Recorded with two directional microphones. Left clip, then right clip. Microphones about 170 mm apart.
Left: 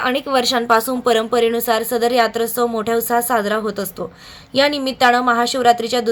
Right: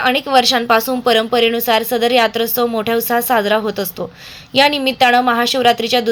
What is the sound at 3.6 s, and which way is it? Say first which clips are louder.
Speech: right 3 dB; 40° right (ahead or behind).